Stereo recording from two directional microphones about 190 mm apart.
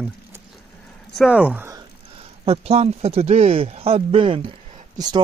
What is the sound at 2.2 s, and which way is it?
Speech, 30° right (ahead or behind).